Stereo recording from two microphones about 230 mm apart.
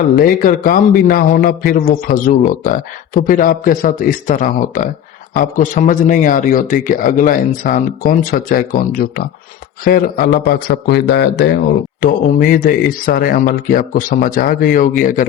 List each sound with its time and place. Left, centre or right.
0.2 s a man's voice: left